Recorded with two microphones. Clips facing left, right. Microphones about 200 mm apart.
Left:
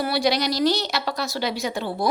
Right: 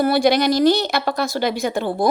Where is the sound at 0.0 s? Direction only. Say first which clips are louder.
Right 6 dB; 50° right (ahead or behind).